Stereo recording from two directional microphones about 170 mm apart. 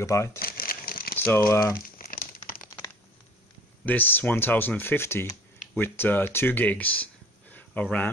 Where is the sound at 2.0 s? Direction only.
55° left (ahead or behind).